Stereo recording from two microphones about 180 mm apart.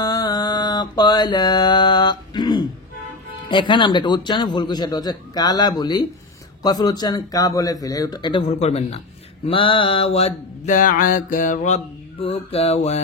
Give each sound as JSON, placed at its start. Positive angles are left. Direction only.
{"t": 0.0, "sound": "mantra", "side_deg": 20}
{"t": 3.4, "sound": "a man's voice", "side_deg": 25}
{"t": 9.5, "sound": "a sound", "side_deg": 30}